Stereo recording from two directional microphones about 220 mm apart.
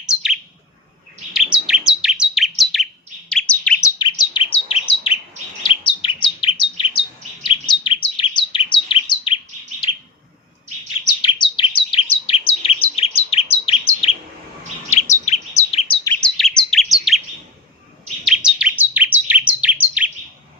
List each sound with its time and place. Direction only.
0.1 s bird: centre (ahead or behind)
1.3 s chirp: 5° right (ahead or behind)
3.9 s bird: 20° left (ahead or behind)
5.6 s chirp: 20° left (ahead or behind)
7.4 s bird: 20° left (ahead or behind)
11.2 s bird: 20° left (ahead or behind)
14.8 s chirp: 30° left (ahead or behind)
16.2 s chirp: 5° left (ahead or behind)
18.3 s chirp: 5° right (ahead or behind)